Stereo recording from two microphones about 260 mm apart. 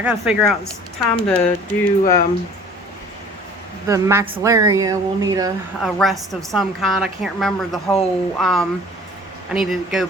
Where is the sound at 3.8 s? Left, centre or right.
Centre.